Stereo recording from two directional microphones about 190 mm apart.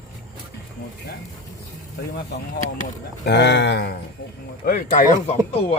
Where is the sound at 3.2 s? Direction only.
65° left (ahead or behind).